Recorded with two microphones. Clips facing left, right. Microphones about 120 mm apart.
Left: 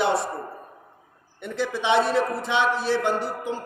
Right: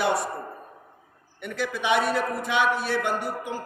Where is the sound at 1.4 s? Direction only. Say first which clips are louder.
Left 3 dB; 25° left (ahead or behind).